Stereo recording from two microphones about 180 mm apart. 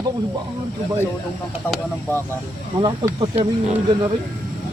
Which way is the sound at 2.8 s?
25° right (ahead or behind).